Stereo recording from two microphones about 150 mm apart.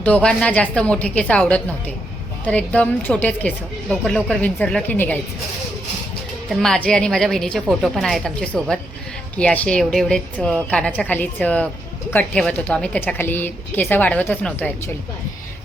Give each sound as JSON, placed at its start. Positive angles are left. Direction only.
{"t": 0.0, "sound": "a woman's voice", "side_deg": 10}
{"t": 6.5, "sound": "a woman's voice", "side_deg": 5}